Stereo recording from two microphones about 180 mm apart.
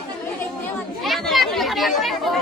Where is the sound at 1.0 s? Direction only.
Centre (ahead or behind).